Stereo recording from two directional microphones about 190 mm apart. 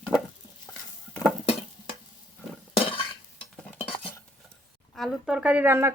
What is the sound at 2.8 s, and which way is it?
Chink, 30° left (ahead or behind).